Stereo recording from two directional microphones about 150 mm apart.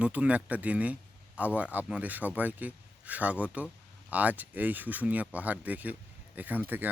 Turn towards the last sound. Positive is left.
turn(degrees=-10)  # may be behind; listen again after turning